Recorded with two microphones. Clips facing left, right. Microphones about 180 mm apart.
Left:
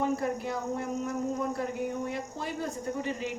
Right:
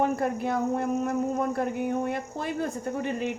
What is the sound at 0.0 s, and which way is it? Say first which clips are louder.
A woman's voice: right 3 dB; 60° right (ahead or behind).